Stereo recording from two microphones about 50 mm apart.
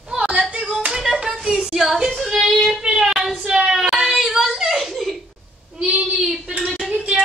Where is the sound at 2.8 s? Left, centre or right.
Centre.